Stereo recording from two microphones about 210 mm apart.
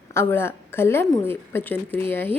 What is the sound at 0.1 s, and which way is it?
A woman's voice, 10° left (ahead or behind).